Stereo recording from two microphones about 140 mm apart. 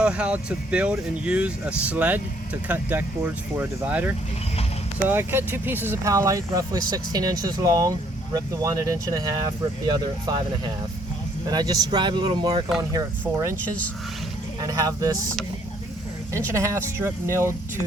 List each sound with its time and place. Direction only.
0.0 s speech: 10° right (ahead or behind); by 10.3 s 30° right (ahead or behind)
11.4 s speech: 25° right (ahead or behind)
12.9 s speech: 25° right (ahead or behind)
14.6 s speech: 25° right (ahead or behind)
16.3 s speech: 20° right (ahead or behind)